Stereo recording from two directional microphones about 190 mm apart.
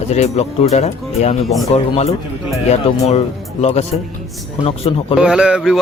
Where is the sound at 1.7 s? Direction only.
35° left (ahead or behind).